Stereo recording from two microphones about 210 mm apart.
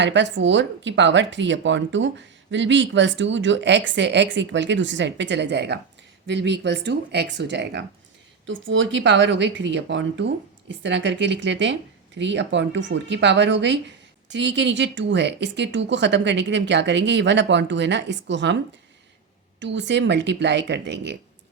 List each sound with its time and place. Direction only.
0.0 s speech: 55° right (ahead or behind)
19.5 s speech: 60° right (ahead or behind)